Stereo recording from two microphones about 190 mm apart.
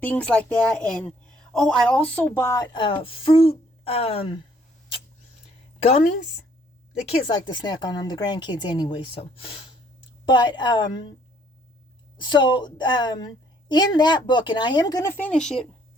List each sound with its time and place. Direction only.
0.0 s a woman's voice: 10° left (ahead or behind)
2.7 s a woman's voice: 25° left (ahead or behind)
5.8 s a woman's voice: 35° left (ahead or behind)
7.0 s a woman's voice: 25° left (ahead or behind)
12.1 s a woman's voice: 25° left (ahead or behind); by 15.6 s 5° left (ahead or behind)